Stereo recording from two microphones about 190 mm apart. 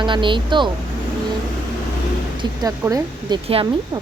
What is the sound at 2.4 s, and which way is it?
Speech, 20° right (ahead or behind).